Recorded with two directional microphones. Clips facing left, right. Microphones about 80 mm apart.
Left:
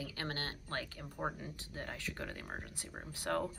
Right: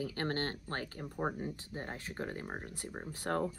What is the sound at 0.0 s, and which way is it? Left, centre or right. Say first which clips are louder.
Speech: right 6 dB; right.